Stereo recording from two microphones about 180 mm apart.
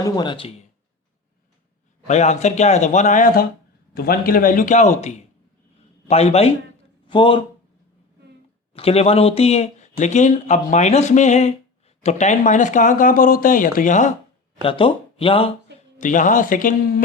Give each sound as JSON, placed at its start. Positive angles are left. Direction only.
{"t": 0.0, "sound": "speech", "side_deg": 25}
{"t": 2.0, "sound": "speech", "side_deg": 40}
{"t": 3.9, "sound": "speech", "side_deg": 60}
{"t": 8.7, "sound": "speech", "side_deg": 35}
{"t": 14.6, "sound": "speech", "side_deg": 30}
{"t": 16.0, "sound": "speech", "side_deg": 45}